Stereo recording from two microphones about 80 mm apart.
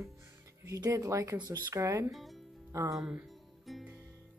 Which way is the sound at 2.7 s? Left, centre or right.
Right.